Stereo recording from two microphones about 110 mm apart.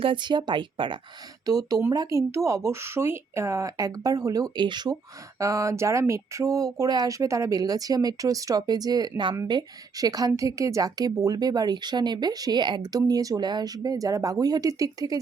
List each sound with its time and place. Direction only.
0.0 s speech: 50° right (ahead or behind)
1.5 s speech: 35° right (ahead or behind)
5.4 s speech: 30° right (ahead or behind)